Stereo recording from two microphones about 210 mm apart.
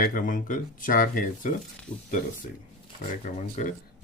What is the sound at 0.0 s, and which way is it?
Speech, 40° left (ahead or behind).